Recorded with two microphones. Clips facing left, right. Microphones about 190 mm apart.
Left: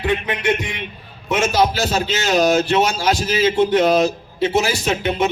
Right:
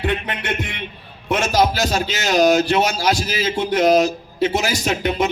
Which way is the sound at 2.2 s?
40° right (ahead or behind).